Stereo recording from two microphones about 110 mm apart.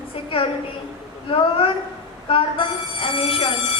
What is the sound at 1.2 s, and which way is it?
A woman's voice, 55° left (ahead or behind).